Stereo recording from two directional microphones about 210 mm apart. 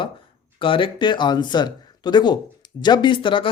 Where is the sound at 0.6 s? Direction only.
25° left (ahead or behind).